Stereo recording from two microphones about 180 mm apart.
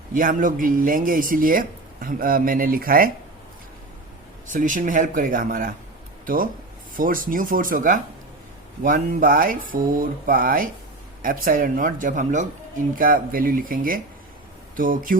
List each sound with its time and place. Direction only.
0.1 s speech: 50° right (ahead or behind)
4.4 s speech: 45° right (ahead or behind)